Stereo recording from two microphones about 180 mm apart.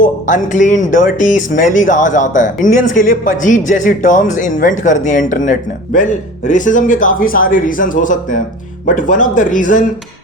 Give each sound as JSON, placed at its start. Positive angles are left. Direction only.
{"t": 0.0, "sound": "speech", "side_deg": 45}